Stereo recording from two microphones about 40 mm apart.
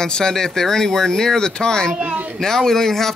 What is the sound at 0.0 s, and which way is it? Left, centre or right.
Speech, centre.